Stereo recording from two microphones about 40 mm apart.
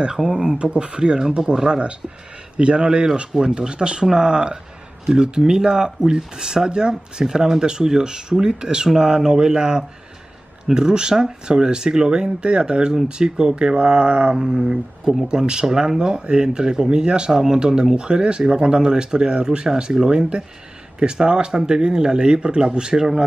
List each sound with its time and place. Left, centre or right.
0.0 s speech: centre
0.6 s speech: right